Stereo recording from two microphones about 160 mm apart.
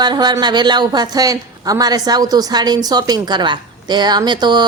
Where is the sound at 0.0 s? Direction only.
25° right (ahead or behind).